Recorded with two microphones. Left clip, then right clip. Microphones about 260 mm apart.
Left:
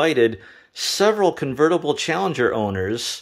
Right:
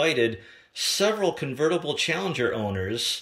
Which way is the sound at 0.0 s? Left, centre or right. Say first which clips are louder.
Left 5 dB; centre.